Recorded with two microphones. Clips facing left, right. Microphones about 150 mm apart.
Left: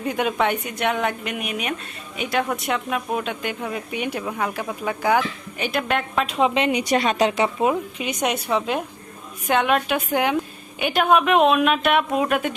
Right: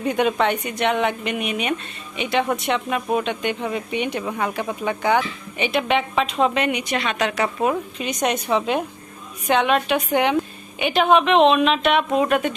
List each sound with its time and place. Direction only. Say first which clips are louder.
0.0 s speech: right 2 dB; 5° left (ahead or behind)
6.5 s a woman's voice: left 1 dB; 25° left (ahead or behind)
6.8 s a woman's voice: left 4 dB; 40° left (ahead or behind)
7.4 s a woman's voice: left 1 dB; 15° left (ahead or behind)